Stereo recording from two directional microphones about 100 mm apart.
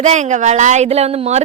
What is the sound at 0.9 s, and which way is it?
Speech, 90° right.